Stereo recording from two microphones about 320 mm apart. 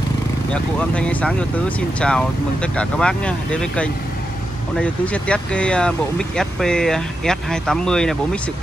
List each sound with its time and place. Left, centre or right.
0.5 s speech: centre